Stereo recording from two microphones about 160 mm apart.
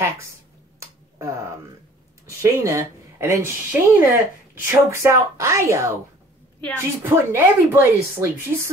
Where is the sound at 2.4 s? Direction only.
20° right (ahead or behind).